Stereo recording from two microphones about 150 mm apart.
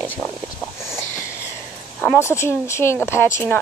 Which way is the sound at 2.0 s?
15° left (ahead or behind).